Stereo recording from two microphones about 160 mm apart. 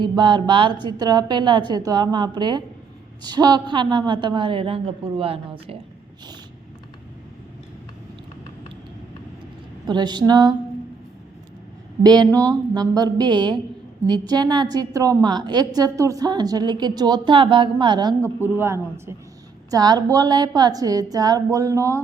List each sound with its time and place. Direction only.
0.0 s a woman's voice: 30° right (ahead or behind)
9.8 s a woman's voice: 25° right (ahead or behind)
12.0 s a woman's voice: 25° right (ahead or behind)
12.3 s a sound: 10° left (ahead or behind)
12.7 s a woman's voice: 25° right (ahead or behind)
18.4 s a woman's voice: 15° right (ahead or behind)